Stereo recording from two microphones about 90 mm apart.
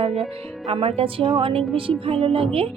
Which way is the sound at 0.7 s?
85° right.